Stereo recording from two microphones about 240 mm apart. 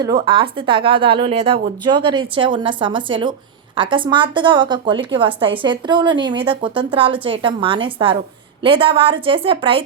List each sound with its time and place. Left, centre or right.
0.0 s a woman's voice: centre